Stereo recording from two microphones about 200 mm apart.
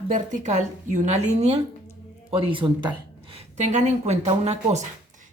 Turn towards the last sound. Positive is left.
turn(degrees=-35)  # may be behind; listen again after turning